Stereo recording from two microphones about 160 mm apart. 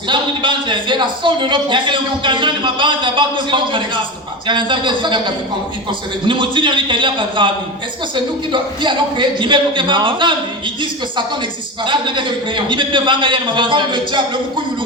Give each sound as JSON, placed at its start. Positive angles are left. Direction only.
{"t": 0.1, "sound": "a man's voice", "side_deg": -30}
{"t": 11.9, "sound": "a man's voice", "side_deg": -30}